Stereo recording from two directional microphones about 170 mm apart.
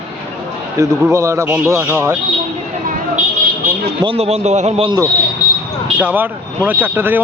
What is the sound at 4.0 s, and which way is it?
Speech, 35° right (ahead or behind).